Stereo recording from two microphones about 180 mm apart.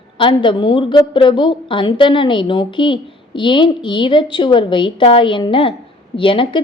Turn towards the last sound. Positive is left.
turn(degrees=30)  # may be behind; listen again after turning